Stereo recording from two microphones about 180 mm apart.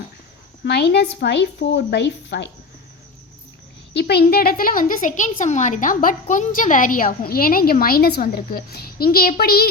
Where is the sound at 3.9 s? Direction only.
70° left (ahead or behind).